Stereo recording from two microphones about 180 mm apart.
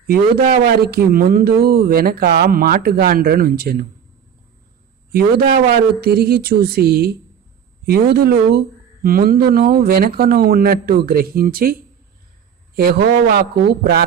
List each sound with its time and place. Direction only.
0.1 s speech: 55° right (ahead or behind)
5.1 s speech: 55° right (ahead or behind)